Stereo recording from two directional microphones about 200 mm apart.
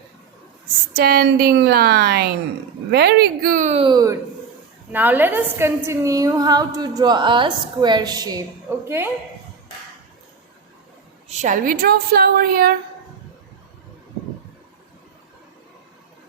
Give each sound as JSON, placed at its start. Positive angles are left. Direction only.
{"t": 0.9, "sound": "a woman's voice", "side_deg": -50}
{"t": 11.3, "sound": "a woman's voice", "side_deg": -35}